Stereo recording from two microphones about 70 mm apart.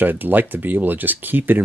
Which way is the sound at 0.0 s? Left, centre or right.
Right.